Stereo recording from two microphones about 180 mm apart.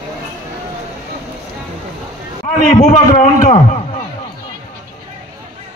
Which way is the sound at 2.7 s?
45° left (ahead or behind).